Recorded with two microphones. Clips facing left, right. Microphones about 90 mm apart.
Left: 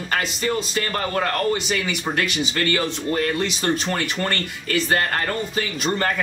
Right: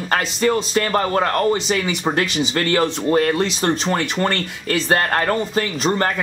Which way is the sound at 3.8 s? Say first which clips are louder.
Right 4 dB; 30° right (ahead or behind).